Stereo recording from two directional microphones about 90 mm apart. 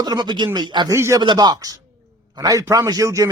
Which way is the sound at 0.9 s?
30° right (ahead or behind).